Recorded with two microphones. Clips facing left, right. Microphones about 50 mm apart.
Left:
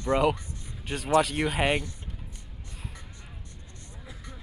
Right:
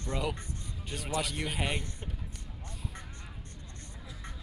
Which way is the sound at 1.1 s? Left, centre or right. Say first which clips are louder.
Left 11 dB; left.